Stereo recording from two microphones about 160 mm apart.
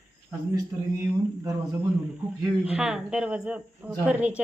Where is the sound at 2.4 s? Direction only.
5° right (ahead or behind).